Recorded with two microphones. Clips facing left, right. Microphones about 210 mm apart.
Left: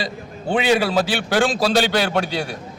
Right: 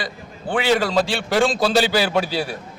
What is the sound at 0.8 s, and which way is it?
A man's voice, 5° left (ahead or behind).